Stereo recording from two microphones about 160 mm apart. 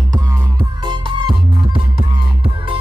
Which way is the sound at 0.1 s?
25° right (ahead or behind).